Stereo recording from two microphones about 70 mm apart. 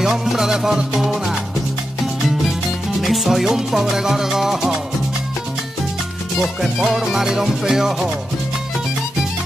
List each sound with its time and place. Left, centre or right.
0.0 s music: centre
3.0 s music: centre
6.4 s music: centre